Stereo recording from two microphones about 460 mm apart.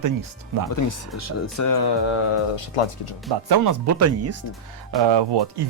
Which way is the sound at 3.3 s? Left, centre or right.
Right.